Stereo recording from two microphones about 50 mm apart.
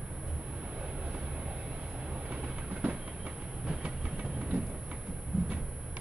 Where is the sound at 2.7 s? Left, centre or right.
Right.